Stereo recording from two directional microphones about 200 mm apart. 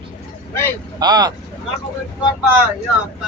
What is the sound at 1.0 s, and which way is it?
Speech, 20° right (ahead or behind).